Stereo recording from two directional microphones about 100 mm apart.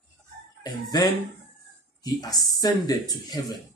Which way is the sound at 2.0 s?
40° left (ahead or behind).